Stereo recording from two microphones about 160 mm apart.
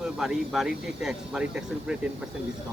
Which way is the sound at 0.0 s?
Centre (ahead or behind).